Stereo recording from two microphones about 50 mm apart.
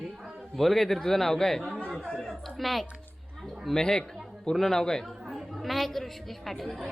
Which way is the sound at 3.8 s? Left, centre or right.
Centre.